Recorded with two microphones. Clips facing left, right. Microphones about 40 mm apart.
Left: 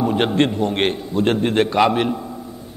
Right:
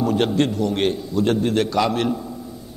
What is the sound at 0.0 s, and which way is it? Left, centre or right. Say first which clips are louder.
A man's voice: left 2 dB; left.